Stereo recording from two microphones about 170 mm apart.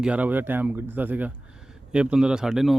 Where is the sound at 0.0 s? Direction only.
10° right (ahead or behind).